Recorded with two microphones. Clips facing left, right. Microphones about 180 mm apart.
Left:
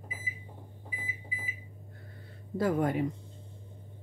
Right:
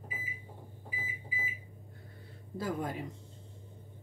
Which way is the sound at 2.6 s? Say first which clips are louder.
Left 8 dB; 65° left (ahead or behind).